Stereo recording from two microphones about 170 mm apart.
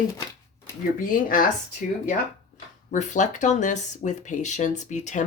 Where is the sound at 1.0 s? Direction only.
55° left (ahead or behind).